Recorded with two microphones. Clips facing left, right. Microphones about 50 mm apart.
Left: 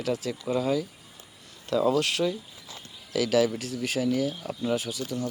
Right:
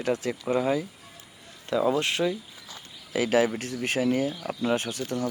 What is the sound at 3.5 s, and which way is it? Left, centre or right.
Speech, right.